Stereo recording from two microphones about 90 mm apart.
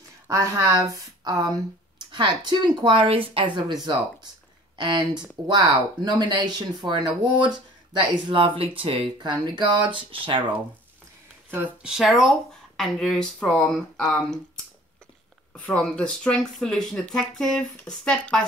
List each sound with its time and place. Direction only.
0.3 s speech: 35° right (ahead or behind); by 3.7 s 65° right (ahead or behind)
3.8 s speech: 50° right (ahead or behind); by 10.4 s 75° right (ahead or behind)
11.5 s speech: 20° right (ahead or behind)
11.9 s speech: 5° right (ahead or behind)
15.5 s speech: 15° left (ahead or behind)